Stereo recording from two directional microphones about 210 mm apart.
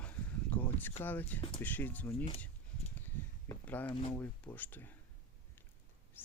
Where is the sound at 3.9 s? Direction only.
25° left (ahead or behind).